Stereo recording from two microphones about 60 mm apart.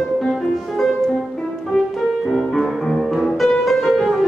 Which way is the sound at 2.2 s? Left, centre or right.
Centre.